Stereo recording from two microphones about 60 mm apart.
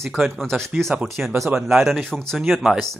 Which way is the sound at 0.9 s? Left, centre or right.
Right.